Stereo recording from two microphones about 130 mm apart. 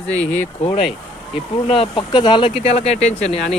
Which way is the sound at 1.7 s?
40° left (ahead or behind).